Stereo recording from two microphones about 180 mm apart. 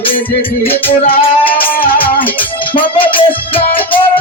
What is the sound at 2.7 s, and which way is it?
Music, 30° left (ahead or behind).